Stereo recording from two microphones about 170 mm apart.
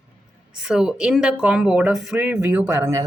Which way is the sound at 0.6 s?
5° right (ahead or behind).